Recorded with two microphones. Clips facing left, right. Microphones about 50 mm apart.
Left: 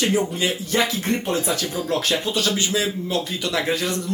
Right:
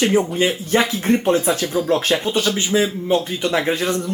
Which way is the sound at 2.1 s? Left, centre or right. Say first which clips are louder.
Right 3 dB; right.